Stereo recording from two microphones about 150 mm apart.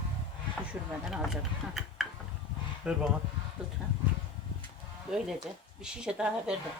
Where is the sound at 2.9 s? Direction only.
5° right (ahead or behind).